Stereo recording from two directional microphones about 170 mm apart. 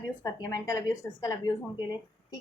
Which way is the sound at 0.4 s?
20° left (ahead or behind).